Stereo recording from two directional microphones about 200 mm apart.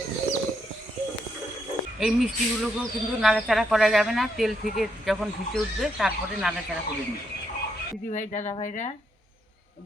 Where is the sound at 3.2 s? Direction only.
Centre (ahead or behind).